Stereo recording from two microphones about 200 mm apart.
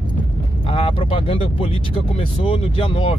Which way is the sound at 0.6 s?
25° left (ahead or behind).